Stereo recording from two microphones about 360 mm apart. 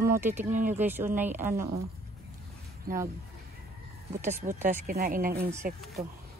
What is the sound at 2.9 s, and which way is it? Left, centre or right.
Speech, right.